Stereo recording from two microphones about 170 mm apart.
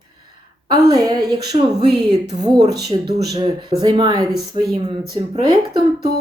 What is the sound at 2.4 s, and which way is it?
Speech, 25° right (ahead or behind).